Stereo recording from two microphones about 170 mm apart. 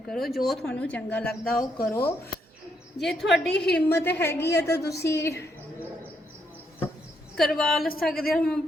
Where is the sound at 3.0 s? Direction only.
Centre (ahead or behind).